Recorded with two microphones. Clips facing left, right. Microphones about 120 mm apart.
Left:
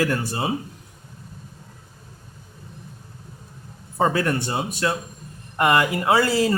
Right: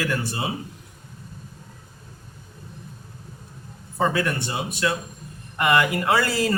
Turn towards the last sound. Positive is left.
turn(degrees=25)  # may be behind; listen again after turning